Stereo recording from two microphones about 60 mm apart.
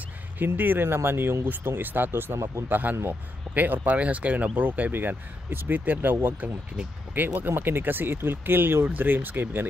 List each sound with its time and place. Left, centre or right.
0.6 s speech: right
2.3 s speech: right
2.7 s speech: right